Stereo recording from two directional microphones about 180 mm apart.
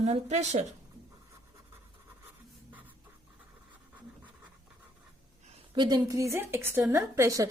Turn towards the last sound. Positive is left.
turn(degrees=-15)  # may be behind; listen again after turning